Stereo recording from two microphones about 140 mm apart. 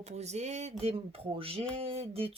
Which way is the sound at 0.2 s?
50° right (ahead or behind).